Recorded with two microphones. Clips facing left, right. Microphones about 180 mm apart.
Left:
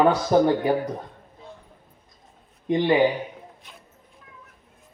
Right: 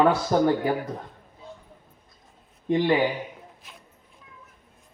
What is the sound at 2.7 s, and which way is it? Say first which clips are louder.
Speech: left 1 dB; 20° left (ahead or behind).